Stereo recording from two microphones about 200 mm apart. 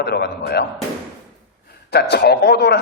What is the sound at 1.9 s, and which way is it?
Speech, 55° left (ahead or behind).